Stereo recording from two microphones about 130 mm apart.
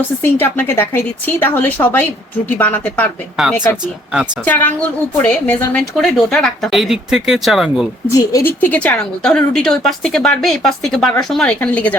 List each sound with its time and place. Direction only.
0.2 s speech: 15° left (ahead or behind)
3.4 s a woman's voice: centre (ahead or behind)
4.4 s a woman's voice: 15° left (ahead or behind); by 7.9 s centre (ahead or behind)
8.3 s a woman's voice: 25° left (ahead or behind)
8.6 s a woman's voice: 10° left (ahead or behind)